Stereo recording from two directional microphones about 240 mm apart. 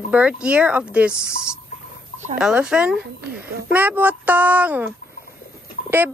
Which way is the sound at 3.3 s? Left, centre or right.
Right.